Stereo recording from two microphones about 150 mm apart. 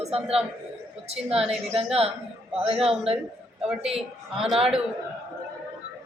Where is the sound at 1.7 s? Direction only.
40° right (ahead or behind).